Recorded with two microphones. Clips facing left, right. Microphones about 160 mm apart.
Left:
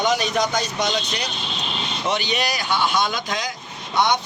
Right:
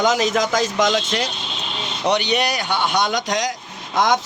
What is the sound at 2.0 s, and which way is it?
Speech, 70° right (ahead or behind).